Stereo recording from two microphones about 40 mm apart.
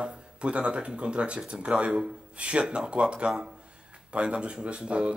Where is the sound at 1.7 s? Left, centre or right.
Centre.